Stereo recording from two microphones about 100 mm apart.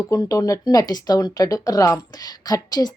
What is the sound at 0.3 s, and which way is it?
A woman's voice, 35° left (ahead or behind).